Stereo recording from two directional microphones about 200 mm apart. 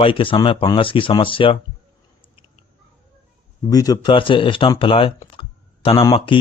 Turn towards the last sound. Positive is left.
turn(degrees=25)  # may be behind; listen again after turning